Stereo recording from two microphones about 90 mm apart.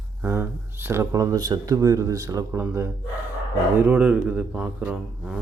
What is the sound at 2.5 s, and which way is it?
Speech, 25° right (ahead or behind).